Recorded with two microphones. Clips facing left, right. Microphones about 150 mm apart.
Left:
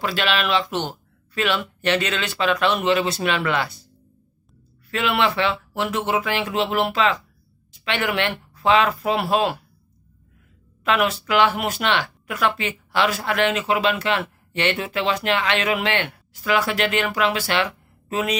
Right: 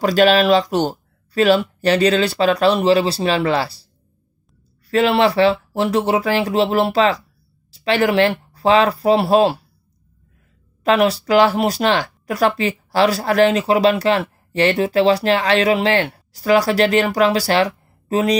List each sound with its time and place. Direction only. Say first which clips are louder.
0.0 s speech: right 10 dB; 40° right (ahead or behind)
4.9 s speech: right 7 dB; 35° right (ahead or behind)
10.8 s speech: right 6 dB; 35° right (ahead or behind)